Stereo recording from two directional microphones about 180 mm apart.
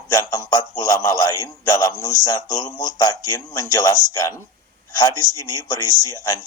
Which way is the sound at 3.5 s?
20° left (ahead or behind).